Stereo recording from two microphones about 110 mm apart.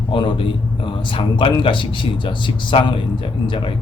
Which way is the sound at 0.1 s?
50° left (ahead or behind).